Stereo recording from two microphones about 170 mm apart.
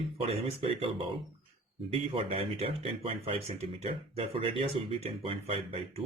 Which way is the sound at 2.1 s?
35° right (ahead or behind).